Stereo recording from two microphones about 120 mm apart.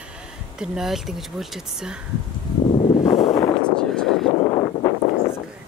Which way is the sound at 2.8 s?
60° left (ahead or behind).